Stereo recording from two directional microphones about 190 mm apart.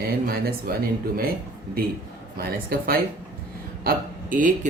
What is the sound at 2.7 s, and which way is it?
Speech, 50° right (ahead or behind).